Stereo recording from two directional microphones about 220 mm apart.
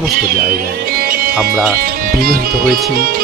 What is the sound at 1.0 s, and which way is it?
Music, 40° right (ahead or behind).